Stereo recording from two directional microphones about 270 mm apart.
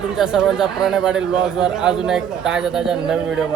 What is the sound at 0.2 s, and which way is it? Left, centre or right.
A man's voice, centre.